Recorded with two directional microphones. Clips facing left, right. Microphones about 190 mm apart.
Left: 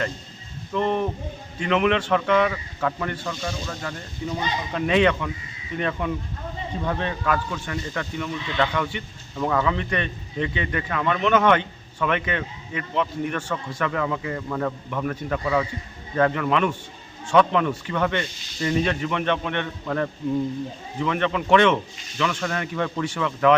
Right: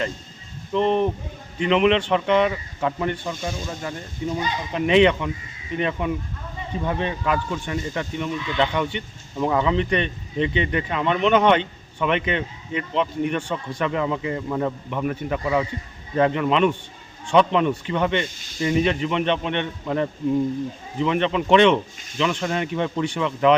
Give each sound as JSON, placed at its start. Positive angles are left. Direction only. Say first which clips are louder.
{"t": 0.7, "sound": "a man's voice", "louder": "right 3 dB", "side_deg": -20}